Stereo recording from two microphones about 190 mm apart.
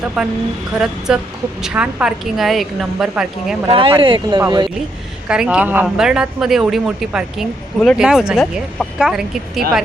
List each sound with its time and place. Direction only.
0.2 s speech: centre (ahead or behind)
3.7 s speech: 30° right (ahead or behind)
5.3 s speech: 5° right (ahead or behind)